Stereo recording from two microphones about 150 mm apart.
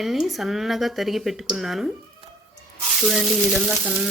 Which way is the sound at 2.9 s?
Centre (ahead or behind).